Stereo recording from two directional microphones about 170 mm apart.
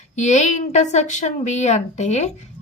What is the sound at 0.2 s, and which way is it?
A woman's voice, 45° left (ahead or behind).